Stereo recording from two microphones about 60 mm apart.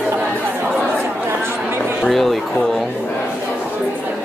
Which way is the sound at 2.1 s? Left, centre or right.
Centre.